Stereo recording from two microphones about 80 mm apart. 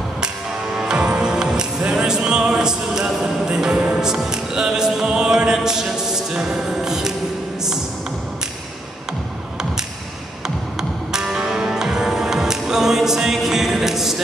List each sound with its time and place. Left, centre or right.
0.7 s music: centre
10.8 s music: centre